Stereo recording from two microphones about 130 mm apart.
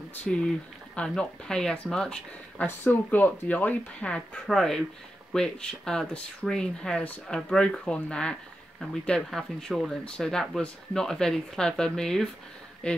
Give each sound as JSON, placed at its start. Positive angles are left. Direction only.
{"t": 0.2, "sound": "speech", "side_deg": 5}